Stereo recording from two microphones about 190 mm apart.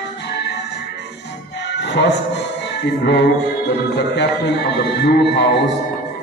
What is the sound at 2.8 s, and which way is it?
A man's voice, 60° left (ahead or behind).